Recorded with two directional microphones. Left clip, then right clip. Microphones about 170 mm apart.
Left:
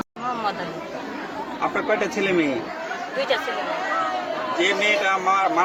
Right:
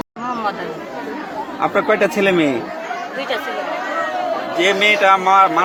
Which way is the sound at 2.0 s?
60° right (ahead or behind).